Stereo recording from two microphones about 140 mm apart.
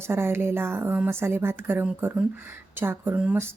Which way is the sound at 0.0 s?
15° right (ahead or behind).